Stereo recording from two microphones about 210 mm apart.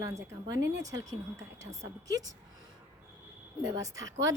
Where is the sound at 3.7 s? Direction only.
15° right (ahead or behind).